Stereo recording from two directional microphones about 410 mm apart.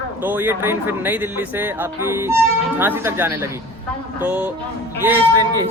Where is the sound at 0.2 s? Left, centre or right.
Centre.